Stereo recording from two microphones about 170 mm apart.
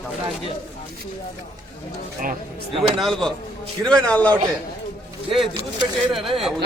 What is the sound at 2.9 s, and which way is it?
Speech, centre (ahead or behind).